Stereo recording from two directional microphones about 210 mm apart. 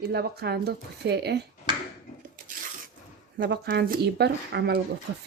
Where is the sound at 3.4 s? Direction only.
55° right (ahead or behind).